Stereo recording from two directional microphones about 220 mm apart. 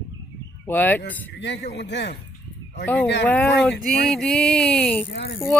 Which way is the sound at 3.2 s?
10° left (ahead or behind).